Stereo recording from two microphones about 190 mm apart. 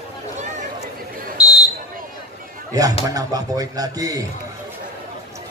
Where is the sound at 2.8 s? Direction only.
20° right (ahead or behind).